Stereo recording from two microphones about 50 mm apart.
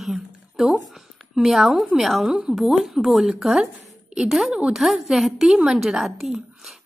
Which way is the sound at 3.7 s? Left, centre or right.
Centre.